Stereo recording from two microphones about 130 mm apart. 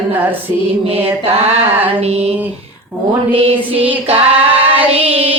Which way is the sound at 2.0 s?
50° right (ahead or behind).